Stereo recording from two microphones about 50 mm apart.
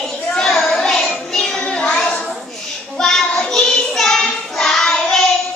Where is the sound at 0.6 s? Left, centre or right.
Centre.